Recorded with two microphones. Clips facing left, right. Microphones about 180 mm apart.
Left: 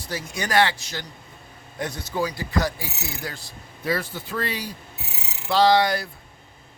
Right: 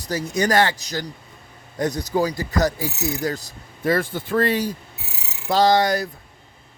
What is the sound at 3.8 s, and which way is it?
Speech, 50° right (ahead or behind).